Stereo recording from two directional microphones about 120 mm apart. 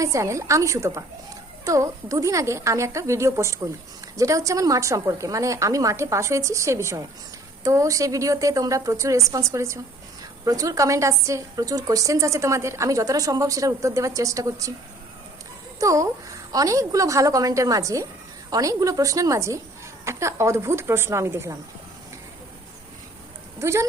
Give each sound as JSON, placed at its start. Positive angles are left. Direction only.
{"t": 0.0, "sound": "a woman's voice", "side_deg": -25}
{"t": 15.8, "sound": "a woman's voice", "side_deg": -25}
{"t": 23.6, "sound": "speech", "side_deg": -25}